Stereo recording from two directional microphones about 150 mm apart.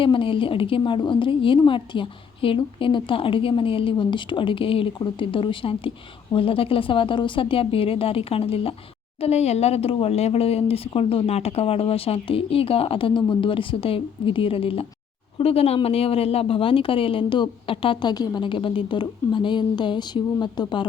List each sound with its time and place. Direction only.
0.0 s a woman's voice: 35° left (ahead or behind)